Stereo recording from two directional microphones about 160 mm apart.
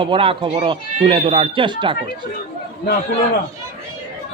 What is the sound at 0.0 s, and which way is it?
Speech, 35° right (ahead or behind).